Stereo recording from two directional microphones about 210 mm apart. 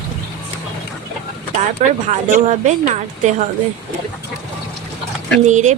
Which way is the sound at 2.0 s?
35° right (ahead or behind).